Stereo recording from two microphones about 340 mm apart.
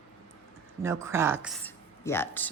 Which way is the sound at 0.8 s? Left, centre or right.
Centre.